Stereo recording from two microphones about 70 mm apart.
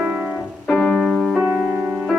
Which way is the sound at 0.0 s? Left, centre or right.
Right.